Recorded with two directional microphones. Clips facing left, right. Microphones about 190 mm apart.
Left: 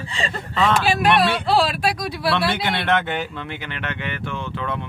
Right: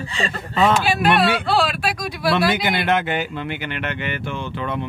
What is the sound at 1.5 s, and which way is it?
Speech, 35° left (ahead or behind).